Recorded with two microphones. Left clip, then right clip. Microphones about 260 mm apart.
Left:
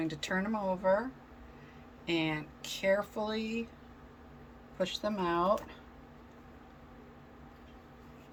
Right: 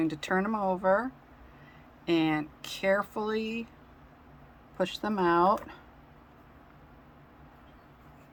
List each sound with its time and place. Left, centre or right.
0.0 s speech: centre
2.0 s speech: centre
4.8 s speech: centre